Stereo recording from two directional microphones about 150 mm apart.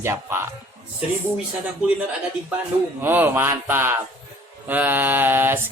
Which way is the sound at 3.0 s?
15° right (ahead or behind).